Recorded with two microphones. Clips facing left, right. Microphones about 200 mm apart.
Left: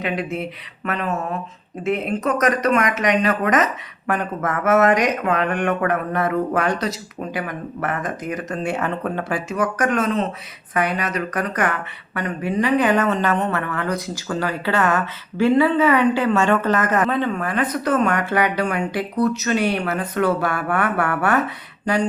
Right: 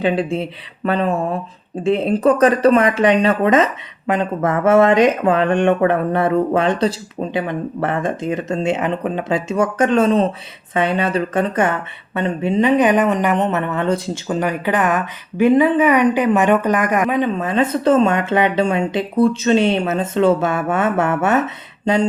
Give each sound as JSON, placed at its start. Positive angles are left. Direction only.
{"t": 0.0, "sound": "speech", "side_deg": -30}